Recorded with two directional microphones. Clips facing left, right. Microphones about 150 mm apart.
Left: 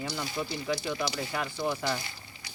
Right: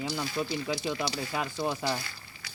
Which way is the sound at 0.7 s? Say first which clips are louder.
Even; 20° right (ahead or behind).